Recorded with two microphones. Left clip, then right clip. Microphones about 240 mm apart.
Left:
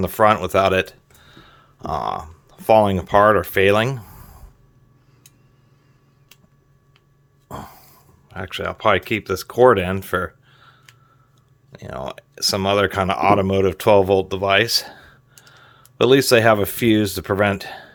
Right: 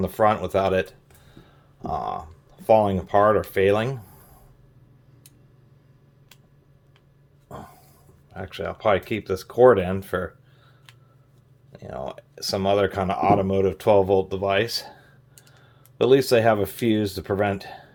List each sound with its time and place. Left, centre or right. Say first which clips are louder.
0.0 s speech: left 5 dB; left
7.4 s a sound: left 6 dB; left
11.7 s speech: left 3 dB; left